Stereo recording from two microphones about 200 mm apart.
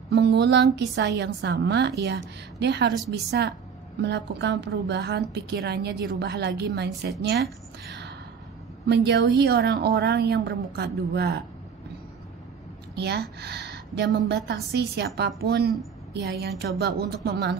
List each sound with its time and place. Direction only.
0.1 s a woman's voice: 55° right (ahead or behind)
7.8 s a sound: 55° right (ahead or behind)
8.8 s a woman's voice: 60° right (ahead or behind)
12.9 s a woman's voice: 55° right (ahead or behind)